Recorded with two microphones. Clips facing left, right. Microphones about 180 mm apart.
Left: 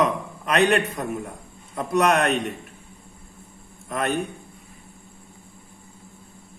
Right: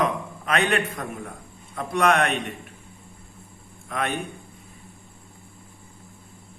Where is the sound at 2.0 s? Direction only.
40° left (ahead or behind).